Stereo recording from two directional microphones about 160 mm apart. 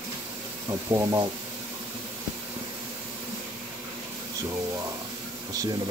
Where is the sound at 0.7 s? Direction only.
20° right (ahead or behind).